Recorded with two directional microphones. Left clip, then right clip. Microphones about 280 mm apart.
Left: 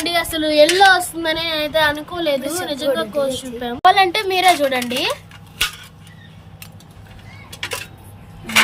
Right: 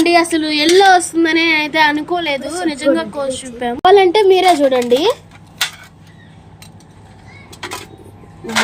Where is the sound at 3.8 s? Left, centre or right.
Centre.